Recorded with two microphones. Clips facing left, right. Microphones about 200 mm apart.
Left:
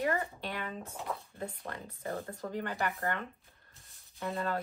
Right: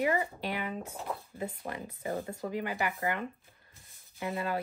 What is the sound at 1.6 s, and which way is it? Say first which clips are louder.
Speech: right 3 dB; 15° right (ahead or behind).